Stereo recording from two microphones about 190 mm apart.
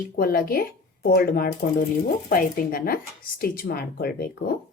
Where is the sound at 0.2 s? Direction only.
50° left (ahead or behind).